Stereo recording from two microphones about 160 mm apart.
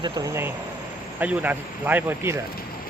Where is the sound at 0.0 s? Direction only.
20° right (ahead or behind).